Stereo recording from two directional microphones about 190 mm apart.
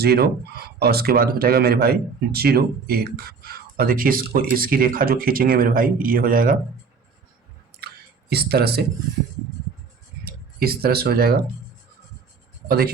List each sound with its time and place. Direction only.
0.0 s speech: 55° right (ahead or behind)
8.3 s speech: 55° right (ahead or behind)
10.2 s speech: 55° right (ahead or behind)
12.6 s speech: 55° right (ahead or behind)